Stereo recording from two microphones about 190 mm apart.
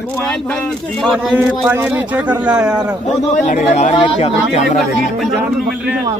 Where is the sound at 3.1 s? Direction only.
40° left (ahead or behind).